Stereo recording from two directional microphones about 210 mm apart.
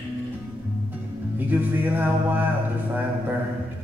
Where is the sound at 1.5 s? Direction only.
10° right (ahead or behind).